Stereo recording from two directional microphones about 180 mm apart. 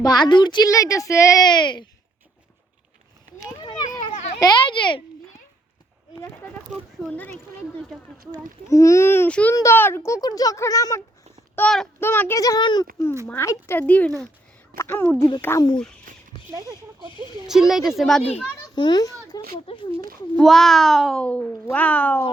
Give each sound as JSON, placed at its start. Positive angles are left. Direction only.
{"t": 0.0, "sound": "speech", "side_deg": 25}
{"t": 3.4, "sound": "a sound", "side_deg": 25}
{"t": 6.1, "sound": "a sound", "side_deg": 10}
{"t": 8.6, "sound": "a child's voice", "side_deg": 15}
{"t": 11.5, "sound": "a child's voice", "side_deg": 5}
{"t": 17.5, "sound": "speech", "side_deg": -5}
{"t": 18.7, "sound": "speech", "side_deg": 25}
{"t": 20.3, "sound": "speech", "side_deg": 0}